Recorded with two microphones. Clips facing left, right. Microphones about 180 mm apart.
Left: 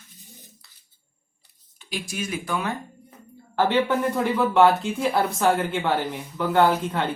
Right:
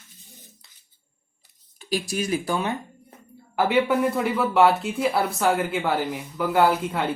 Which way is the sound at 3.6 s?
10° right (ahead or behind).